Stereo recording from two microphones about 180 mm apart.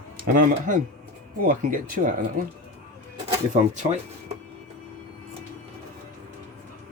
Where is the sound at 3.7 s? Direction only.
40° right (ahead or behind).